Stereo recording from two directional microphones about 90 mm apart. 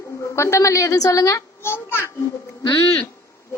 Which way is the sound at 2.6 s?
45° left (ahead or behind).